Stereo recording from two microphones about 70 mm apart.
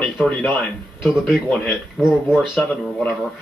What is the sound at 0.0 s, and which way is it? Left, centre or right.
Speech, left.